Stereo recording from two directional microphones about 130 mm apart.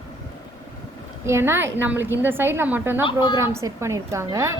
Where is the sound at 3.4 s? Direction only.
20° right (ahead or behind).